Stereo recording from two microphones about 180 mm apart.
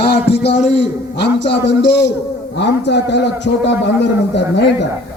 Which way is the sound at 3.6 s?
75° left (ahead or behind).